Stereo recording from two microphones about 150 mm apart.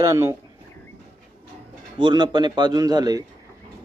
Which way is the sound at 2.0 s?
30° right (ahead or behind).